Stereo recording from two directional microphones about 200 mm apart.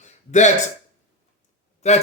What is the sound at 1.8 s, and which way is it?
Speech, 35° left (ahead or behind).